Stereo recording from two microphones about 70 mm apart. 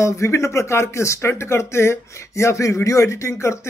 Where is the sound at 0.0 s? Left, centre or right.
Left.